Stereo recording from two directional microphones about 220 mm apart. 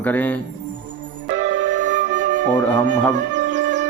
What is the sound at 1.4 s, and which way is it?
Music, 55° right (ahead or behind).